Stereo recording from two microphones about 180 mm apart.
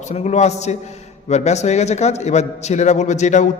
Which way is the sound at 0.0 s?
40° left (ahead or behind).